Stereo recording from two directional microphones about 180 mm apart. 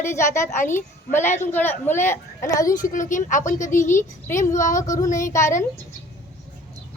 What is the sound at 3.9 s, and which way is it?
A woman's voice, 15° left (ahead or behind).